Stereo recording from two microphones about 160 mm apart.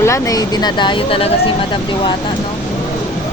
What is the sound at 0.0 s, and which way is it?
Speech, 20° left (ahead or behind).